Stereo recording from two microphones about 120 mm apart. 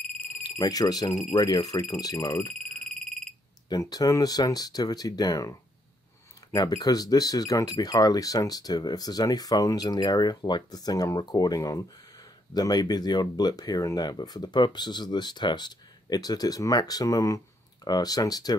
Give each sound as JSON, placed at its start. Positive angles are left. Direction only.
{"t": 0.4, "sound": "speech", "side_deg": 35}
{"t": 2.8, "sound": "frog", "side_deg": 5}
{"t": 3.6, "sound": "speech", "side_deg": 35}